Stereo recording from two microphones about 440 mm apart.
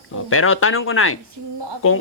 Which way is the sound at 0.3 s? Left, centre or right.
Left.